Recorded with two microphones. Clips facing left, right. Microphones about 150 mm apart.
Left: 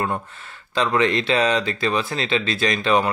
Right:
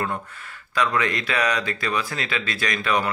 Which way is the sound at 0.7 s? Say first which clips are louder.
Left 4 dB; 25° left (ahead or behind).